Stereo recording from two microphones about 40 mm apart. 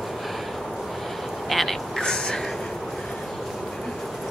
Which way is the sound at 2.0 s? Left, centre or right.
Centre.